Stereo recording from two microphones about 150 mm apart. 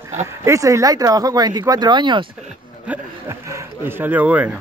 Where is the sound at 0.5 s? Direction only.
20° right (ahead or behind).